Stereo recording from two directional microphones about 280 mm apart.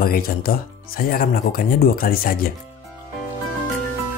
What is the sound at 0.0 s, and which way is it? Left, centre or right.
Speech, left.